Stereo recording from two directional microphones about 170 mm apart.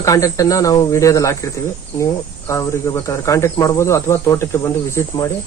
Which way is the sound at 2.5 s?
20° left (ahead or behind).